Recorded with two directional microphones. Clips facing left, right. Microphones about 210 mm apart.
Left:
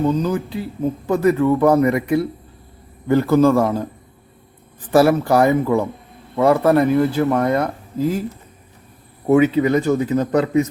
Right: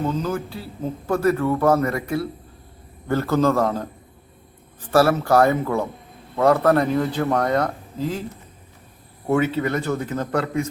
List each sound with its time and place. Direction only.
0.1 s speech: 15° left (ahead or behind)
4.9 s speech: 15° left (ahead or behind)
9.2 s speech: 15° left (ahead or behind)